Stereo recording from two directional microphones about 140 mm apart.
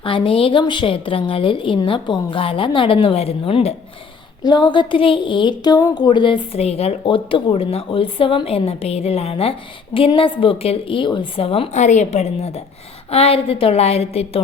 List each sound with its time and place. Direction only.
0.0 s speech: 40° left (ahead or behind)
4.4 s a woman's voice: 35° left (ahead or behind)